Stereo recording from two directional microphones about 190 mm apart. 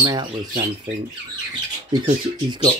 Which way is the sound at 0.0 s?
20° right (ahead or behind).